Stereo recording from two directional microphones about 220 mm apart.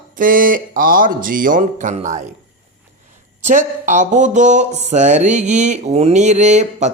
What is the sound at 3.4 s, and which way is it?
Speech, 35° right (ahead or behind).